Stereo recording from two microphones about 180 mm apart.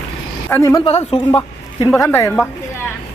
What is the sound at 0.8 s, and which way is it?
A woman's voice, 30° left (ahead or behind).